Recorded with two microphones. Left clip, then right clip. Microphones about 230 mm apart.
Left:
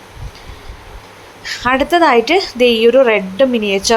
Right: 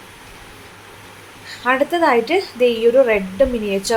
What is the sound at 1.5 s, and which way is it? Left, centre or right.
A woman's voice, left.